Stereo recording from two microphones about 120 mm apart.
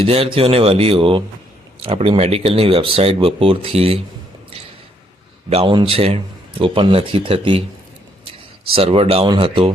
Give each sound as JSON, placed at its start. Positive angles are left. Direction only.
{"t": 0.0, "sound": "speech", "side_deg": -55}
{"t": 5.5, "sound": "speech", "side_deg": -60}
{"t": 8.7, "sound": "speech", "side_deg": -55}